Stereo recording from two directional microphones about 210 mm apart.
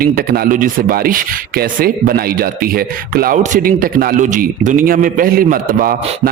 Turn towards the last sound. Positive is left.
turn(degrees=-40)  # may be behind; listen again after turning